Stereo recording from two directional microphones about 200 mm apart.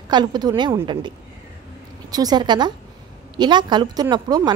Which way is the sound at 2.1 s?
20° right (ahead or behind).